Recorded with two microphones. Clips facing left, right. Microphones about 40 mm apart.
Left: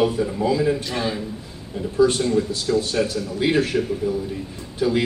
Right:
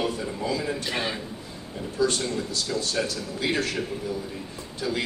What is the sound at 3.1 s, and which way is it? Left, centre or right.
Speech, centre.